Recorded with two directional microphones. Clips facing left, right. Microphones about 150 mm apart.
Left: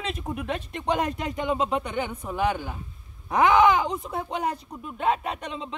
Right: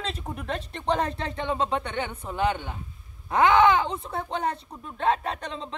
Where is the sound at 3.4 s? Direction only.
25° right (ahead or behind).